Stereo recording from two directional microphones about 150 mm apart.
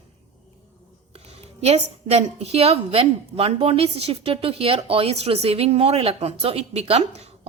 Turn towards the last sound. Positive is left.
turn(degrees=-45)  # may be behind; listen again after turning